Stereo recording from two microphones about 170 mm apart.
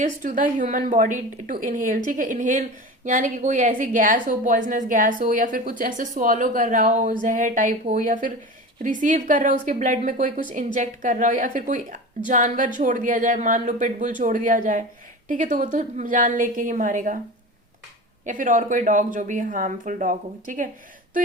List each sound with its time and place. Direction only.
0.0 s a woman's voice: 50° right (ahead or behind)
18.3 s a woman's voice: 50° right (ahead or behind)